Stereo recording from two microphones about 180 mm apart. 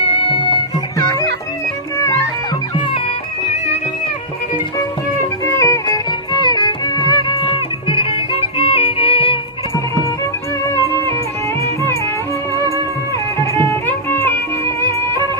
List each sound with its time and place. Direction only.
0.0 s music: 30° left (ahead or behind)
5.5 s music: 20° left (ahead or behind)
9.7 s music: 15° left (ahead or behind)
11.6 s music: 15° left (ahead or behind)
13.7 s music: 10° left (ahead or behind)